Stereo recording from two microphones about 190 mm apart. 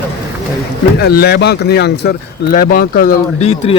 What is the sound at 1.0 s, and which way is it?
Speech, 55° left (ahead or behind).